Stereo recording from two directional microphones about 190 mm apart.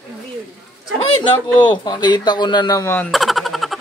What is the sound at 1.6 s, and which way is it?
Speech, 25° left (ahead or behind).